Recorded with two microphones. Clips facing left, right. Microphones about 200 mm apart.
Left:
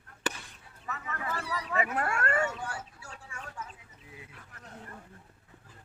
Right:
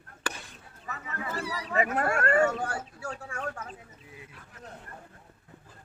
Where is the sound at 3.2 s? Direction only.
70° right (ahead or behind).